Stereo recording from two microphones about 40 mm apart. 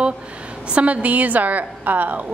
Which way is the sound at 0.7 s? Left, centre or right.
Right.